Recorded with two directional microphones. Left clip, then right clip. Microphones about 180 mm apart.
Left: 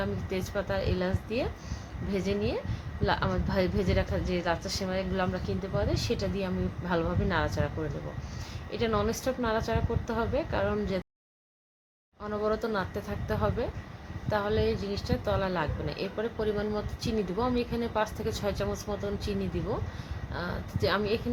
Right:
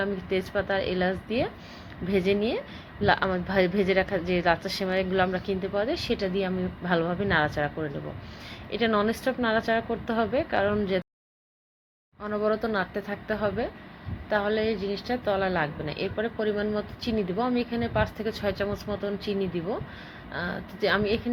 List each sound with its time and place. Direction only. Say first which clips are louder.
0.0 s a woman's voice: right 5 dB; 15° right (ahead or behind)
12.2 s a woman's voice: right 3 dB; 10° right (ahead or behind)